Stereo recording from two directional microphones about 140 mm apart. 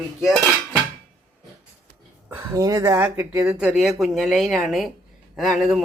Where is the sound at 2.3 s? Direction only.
25° right (ahead or behind).